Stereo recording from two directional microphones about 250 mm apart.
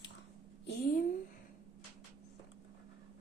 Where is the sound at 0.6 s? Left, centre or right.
Left.